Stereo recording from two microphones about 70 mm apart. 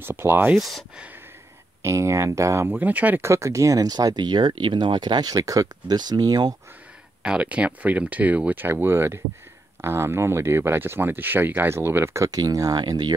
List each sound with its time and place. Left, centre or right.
0.0 s speech: right
0.6 s speech: centre
1.8 s speech: right
2.7 s speech: right
3.2 s speech: right
5.9 s speech: right
7.2 s speech: centre; by 12.3 s right
12.3 s speech: right